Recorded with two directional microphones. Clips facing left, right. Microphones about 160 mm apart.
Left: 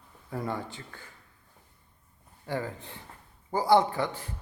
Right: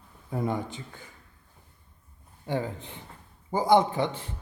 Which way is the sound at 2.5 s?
20° right (ahead or behind).